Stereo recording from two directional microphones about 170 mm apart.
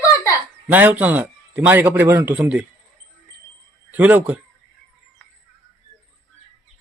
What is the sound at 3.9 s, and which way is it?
Speech, 10° right (ahead or behind).